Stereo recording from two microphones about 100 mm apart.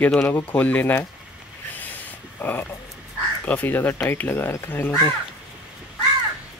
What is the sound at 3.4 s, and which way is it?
Speech, 20° left (ahead or behind).